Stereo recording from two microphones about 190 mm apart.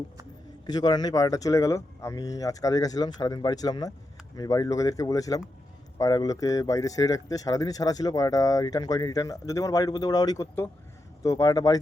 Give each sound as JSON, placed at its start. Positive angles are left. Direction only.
{"t": 0.7, "sound": "speech", "side_deg": 20}